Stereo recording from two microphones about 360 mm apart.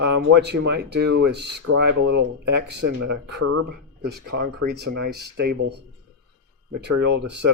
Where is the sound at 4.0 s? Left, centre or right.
Right.